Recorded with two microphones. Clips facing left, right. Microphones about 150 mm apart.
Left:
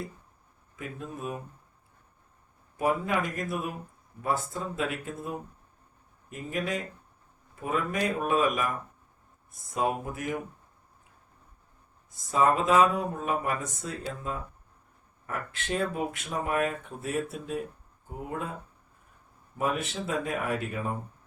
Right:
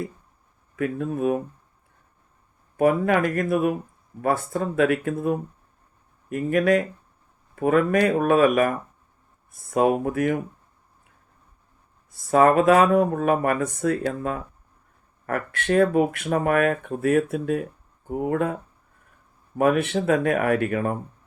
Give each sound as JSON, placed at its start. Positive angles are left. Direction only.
{"t": 0.8, "sound": "speech", "side_deg": -60}
{"t": 2.7, "sound": "speech", "side_deg": -60}
{"t": 6.3, "sound": "speech", "side_deg": -60}
{"t": 9.7, "sound": "speech", "side_deg": -60}
{"t": 12.3, "sound": "speech", "side_deg": -65}
{"t": 19.5, "sound": "speech", "side_deg": -65}